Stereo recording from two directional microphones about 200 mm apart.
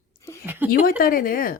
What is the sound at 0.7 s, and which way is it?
Speech, 45° left (ahead or behind).